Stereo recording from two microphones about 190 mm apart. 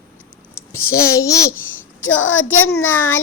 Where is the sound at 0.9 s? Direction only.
15° left (ahead or behind).